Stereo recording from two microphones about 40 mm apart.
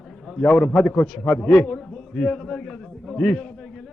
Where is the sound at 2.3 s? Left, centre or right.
Centre.